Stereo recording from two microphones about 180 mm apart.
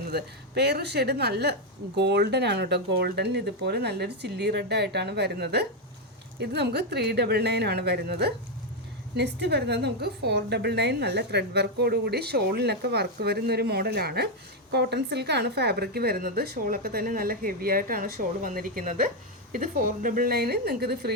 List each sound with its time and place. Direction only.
0.1 s a woman's voice: 65° right (ahead or behind)